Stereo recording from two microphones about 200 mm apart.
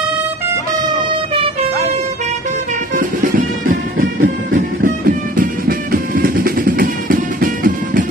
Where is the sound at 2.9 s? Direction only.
45° right (ahead or behind).